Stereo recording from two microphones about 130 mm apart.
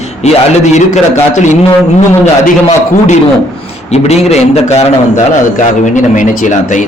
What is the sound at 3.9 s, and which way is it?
Speech, 55° left (ahead or behind).